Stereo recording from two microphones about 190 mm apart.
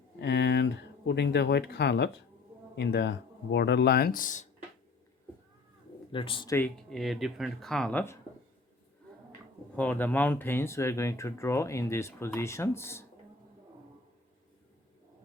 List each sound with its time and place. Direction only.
0.2 s a sound: 60° left (ahead or behind)
2.7 s speech: 65° left (ahead or behind); by 4.4 s 45° left (ahead or behind)
6.1 s speech: 25° left (ahead or behind)
6.6 s speech: centre (ahead or behind)
9.7 s speech: 10° left (ahead or behind)